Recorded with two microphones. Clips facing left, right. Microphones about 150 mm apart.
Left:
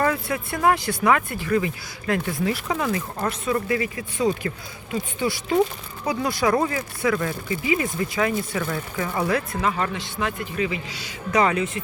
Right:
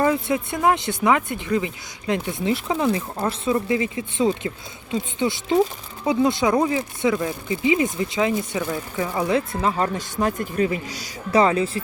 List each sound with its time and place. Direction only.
0.0 s speech: 20° right (ahead or behind)
9.9 s a man's voice: 40° right (ahead or behind)